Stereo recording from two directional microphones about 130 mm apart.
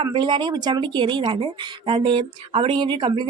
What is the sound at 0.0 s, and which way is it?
A woman's voice, 40° right (ahead or behind).